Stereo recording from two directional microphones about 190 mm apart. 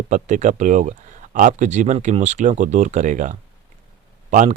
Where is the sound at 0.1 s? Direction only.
40° right (ahead or behind).